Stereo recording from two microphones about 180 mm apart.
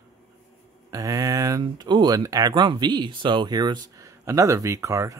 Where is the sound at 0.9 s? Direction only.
20° right (ahead or behind).